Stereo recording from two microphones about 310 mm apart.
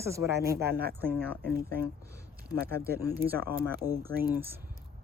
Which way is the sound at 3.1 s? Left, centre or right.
Centre.